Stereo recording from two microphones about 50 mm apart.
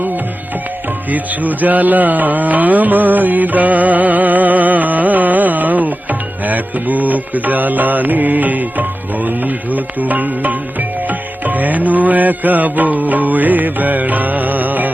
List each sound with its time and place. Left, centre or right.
1.1 s music: right